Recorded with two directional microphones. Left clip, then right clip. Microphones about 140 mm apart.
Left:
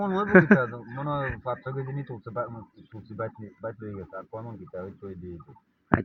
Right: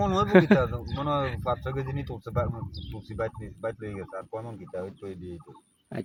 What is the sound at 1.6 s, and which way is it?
Speech, 65° right (ahead or behind).